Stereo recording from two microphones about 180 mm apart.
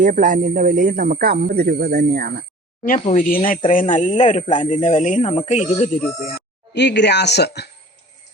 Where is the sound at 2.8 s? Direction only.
45° left (ahead or behind); by 7.7 s 65° left (ahead or behind).